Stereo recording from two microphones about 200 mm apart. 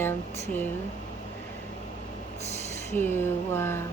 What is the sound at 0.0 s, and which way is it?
Speech, 10° left (ahead or behind).